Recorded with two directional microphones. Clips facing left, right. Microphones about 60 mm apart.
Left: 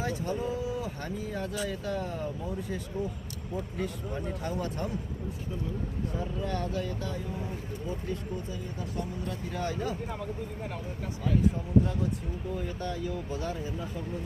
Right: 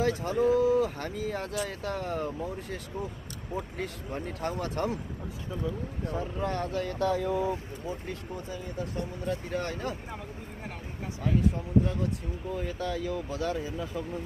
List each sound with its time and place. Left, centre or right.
0.0 s speech: right
6.1 s speech: right
7.1 s speech: right
7.9 s speech: right
9.5 s speech: right
12.8 s speech: right